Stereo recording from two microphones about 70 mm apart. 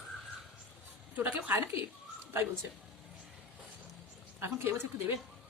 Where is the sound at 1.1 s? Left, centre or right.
Right.